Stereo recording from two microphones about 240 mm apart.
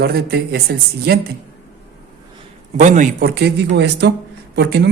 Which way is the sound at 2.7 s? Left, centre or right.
Right.